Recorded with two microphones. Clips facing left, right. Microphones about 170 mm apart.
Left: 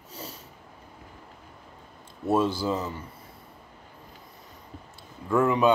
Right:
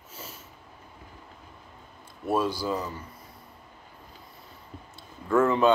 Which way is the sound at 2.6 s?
25° left (ahead or behind).